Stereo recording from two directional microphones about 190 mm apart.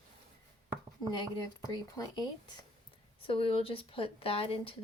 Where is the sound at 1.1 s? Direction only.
20° left (ahead or behind).